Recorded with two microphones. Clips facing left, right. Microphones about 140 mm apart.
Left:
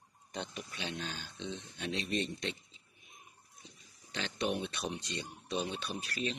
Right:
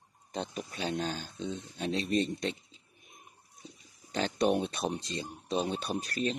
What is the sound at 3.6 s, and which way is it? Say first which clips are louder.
Speech: right 8 dB; 40° right (ahead or behind).